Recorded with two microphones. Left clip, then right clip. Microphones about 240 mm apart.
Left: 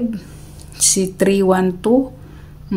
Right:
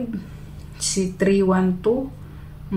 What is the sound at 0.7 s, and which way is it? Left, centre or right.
Speech, left.